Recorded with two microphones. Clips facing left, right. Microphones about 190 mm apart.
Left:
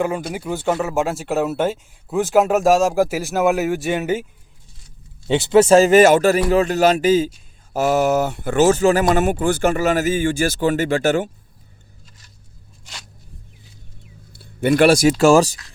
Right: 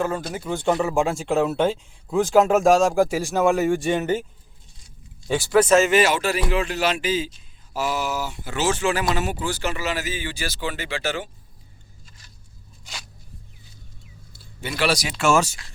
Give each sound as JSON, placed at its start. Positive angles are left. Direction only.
{"t": 0.0, "sound": "speech", "side_deg": 15}
{"t": 5.3, "sound": "speech", "side_deg": 25}
{"t": 14.3, "sound": "speech", "side_deg": 60}